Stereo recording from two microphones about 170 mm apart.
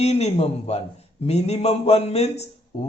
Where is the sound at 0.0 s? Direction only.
40° left (ahead or behind).